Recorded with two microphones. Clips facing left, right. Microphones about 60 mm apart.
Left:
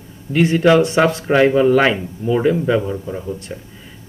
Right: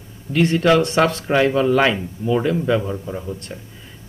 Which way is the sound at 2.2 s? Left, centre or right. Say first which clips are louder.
Left 3 dB; centre.